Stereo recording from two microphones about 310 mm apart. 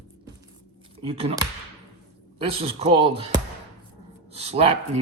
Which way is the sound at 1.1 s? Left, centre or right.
Centre.